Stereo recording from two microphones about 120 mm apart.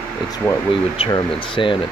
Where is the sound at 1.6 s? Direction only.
45° left (ahead or behind).